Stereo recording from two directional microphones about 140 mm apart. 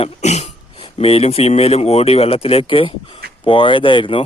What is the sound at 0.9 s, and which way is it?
Speech, 45° left (ahead or behind).